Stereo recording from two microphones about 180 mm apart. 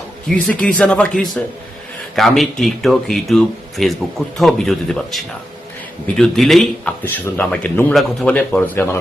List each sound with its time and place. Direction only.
0.3 s speech: 5° left (ahead or behind)